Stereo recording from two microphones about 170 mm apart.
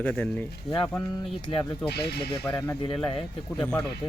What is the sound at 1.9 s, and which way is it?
Speech, 75° left (ahead or behind).